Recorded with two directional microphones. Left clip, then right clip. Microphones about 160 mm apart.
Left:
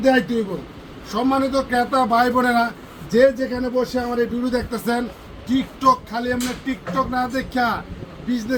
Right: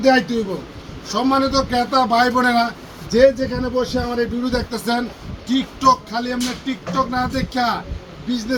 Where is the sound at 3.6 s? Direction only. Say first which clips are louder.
Even; 20° left (ahead or behind); by 7.8 s 5° left (ahead or behind).